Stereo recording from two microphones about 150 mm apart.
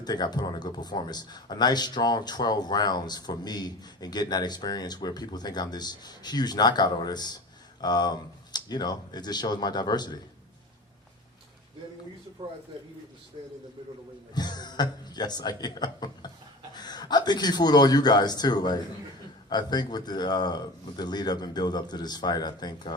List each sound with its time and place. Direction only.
0.0 s speech: 25° left (ahead or behind)
14.3 s speech: 25° left (ahead or behind)